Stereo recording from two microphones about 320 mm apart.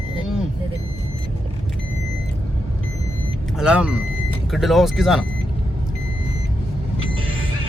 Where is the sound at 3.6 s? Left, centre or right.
Centre.